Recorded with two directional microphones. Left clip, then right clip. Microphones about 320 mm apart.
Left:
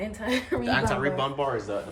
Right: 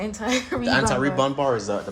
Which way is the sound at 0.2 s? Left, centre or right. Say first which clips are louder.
Right 3 dB; centre.